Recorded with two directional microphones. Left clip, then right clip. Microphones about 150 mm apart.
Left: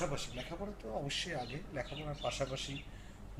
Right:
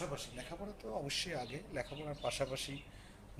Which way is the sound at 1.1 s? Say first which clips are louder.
Left 1 dB; centre (ahead or behind).